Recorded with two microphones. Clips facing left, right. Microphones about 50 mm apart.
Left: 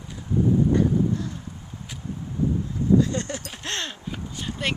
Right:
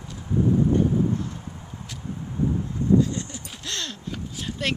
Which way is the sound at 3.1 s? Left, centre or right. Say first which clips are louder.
Left 4 dB; left.